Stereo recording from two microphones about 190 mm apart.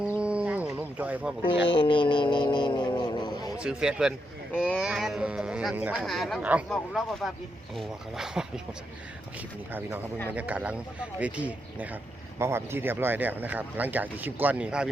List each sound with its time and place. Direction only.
0.2 s a sound: 5° right (ahead or behind)
1.6 s music: 25° left (ahead or behind)
3.6 s speech: 5° right (ahead or behind)
10.3 s speech: 5° right (ahead or behind)